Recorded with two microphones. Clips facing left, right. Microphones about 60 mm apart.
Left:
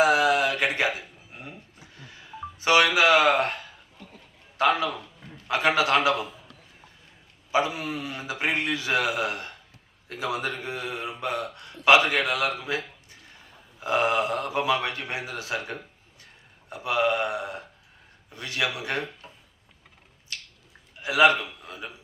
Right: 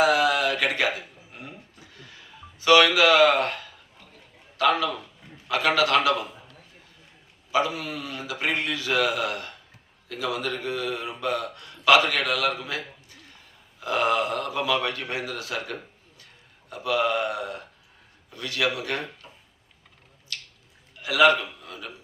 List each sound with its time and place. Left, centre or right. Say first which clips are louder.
0.0 s mantra: even; left
0.6 s a sound: even; left
2.6 s a man's voice: right 2 dB; left
7.5 s speech: even; left
21.0 s a man's voice: right 1 dB; left